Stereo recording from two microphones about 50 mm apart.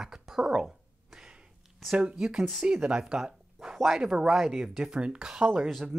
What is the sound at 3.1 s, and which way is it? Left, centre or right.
Speech, centre.